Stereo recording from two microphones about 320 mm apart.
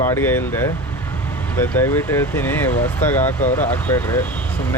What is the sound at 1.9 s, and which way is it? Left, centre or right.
Speech, centre.